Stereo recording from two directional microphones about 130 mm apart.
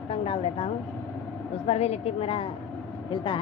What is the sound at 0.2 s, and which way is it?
Speech, 50° left (ahead or behind).